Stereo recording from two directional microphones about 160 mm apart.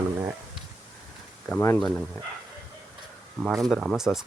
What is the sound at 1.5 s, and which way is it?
Speech, 10° left (ahead or behind).